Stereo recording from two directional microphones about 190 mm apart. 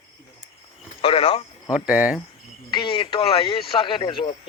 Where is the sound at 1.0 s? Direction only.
30° left (ahead or behind).